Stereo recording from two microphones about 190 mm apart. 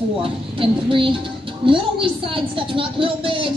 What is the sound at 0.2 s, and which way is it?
A woman's voice, 25° right (ahead or behind).